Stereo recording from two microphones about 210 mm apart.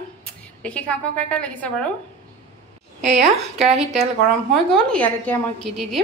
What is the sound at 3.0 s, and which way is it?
A woman's voice, 35° right (ahead or behind).